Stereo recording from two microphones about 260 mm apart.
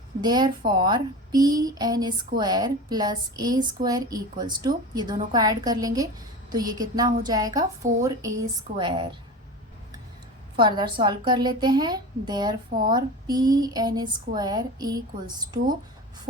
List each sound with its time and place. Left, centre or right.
0.2 s a woman's voice: centre
10.6 s a woman's voice: centre